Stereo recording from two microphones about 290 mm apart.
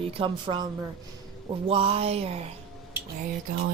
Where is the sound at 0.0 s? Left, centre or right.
Centre.